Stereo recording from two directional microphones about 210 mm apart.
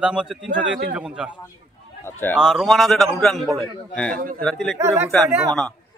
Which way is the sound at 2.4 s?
Centre (ahead or behind).